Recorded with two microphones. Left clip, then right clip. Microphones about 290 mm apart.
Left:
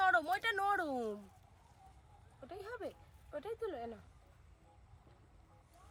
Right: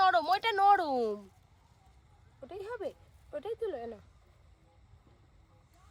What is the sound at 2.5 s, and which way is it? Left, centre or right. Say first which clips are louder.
Speech: right 6 dB; right.